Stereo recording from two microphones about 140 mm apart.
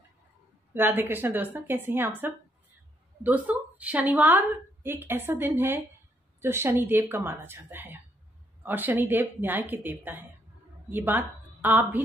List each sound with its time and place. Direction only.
0.7 s a woman's voice: 15° right (ahead or behind)